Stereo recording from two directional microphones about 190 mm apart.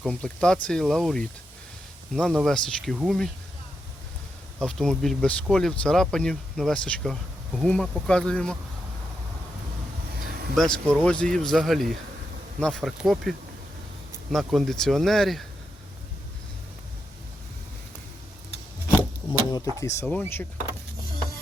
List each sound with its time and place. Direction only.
0.0 s speech: 5° left (ahead or behind)
4.6 s speech: 5° left (ahead or behind)
10.5 s speech: 5° left (ahead or behind)
14.3 s speech: centre (ahead or behind)
18.9 s a sound: 15° left (ahead or behind)